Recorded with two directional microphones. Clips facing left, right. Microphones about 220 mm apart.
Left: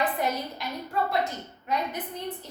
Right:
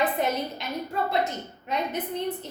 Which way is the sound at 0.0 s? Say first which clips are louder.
Right 2 dB; 20° right (ahead or behind).